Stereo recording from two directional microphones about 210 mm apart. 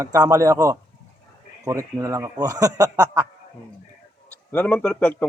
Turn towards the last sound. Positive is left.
turn(degrees=5)  # may be behind; listen again after turning